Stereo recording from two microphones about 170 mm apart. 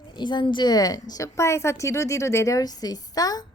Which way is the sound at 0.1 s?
25° left (ahead or behind).